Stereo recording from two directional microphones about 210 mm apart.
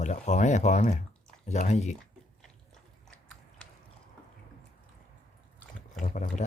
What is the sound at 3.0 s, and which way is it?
Biting, 5° left (ahead or behind).